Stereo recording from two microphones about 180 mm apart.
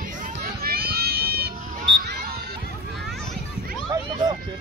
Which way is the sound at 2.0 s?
55° right (ahead or behind).